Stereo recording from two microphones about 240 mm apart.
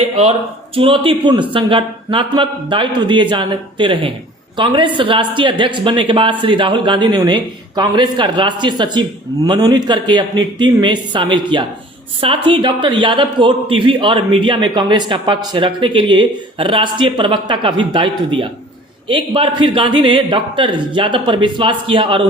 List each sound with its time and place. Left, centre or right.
0.0 s speech: right